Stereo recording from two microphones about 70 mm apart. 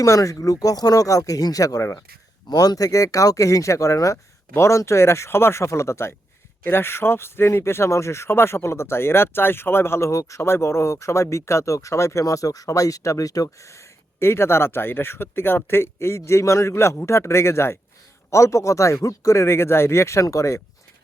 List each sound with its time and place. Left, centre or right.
0.0 s speech: left
2.5 s speech: left